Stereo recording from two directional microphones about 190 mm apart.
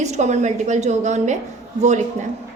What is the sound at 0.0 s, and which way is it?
A woman's voice, 35° right (ahead or behind).